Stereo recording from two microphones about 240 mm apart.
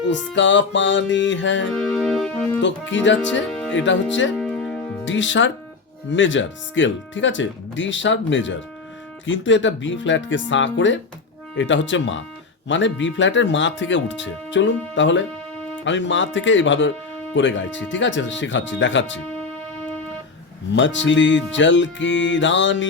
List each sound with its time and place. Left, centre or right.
0.1 s speech: left
2.0 s music: centre
2.6 s speech: left
4.4 s music: centre
5.0 s speech: left
19.3 s music: centre
20.7 s speech: left